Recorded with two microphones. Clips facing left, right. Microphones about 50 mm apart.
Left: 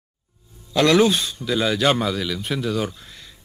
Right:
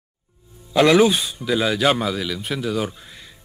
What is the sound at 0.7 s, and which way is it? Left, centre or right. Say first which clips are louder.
A man's voice: right 2 dB; centre.